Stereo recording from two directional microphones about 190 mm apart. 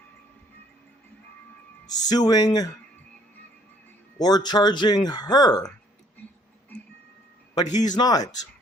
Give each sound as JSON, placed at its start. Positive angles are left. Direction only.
{"t": 1.9, "sound": "speech", "side_deg": 20}
{"t": 4.2, "sound": "speech", "side_deg": 20}
{"t": 7.5, "sound": "speech", "side_deg": 20}